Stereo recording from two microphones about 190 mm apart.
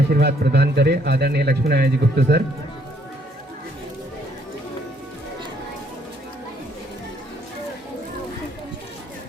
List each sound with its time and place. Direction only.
0.1 s speech: 55° right (ahead or behind)